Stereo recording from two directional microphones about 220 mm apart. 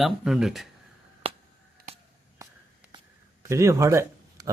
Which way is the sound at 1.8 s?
45° right (ahead or behind).